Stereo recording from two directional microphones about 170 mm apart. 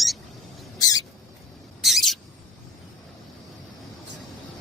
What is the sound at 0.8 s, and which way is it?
Rodents, 20° left (ahead or behind).